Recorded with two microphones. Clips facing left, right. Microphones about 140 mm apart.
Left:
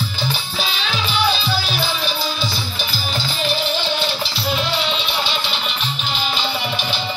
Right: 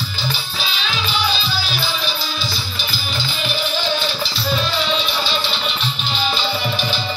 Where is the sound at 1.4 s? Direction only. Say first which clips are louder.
Left 2 dB; 55° left (ahead or behind).